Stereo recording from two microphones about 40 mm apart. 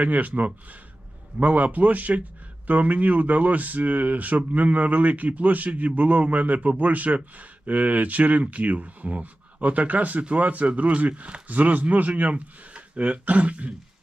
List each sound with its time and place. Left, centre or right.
0.0 s speech: right